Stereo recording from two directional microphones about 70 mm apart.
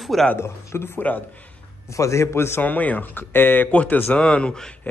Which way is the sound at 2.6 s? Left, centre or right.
Left.